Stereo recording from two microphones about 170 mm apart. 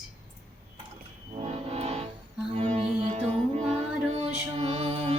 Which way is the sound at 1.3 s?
35° right (ahead or behind).